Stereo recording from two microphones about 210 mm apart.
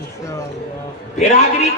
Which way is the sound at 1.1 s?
30° left (ahead or behind).